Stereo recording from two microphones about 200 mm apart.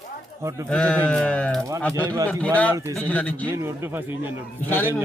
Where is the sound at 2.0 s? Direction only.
15° right (ahead or behind).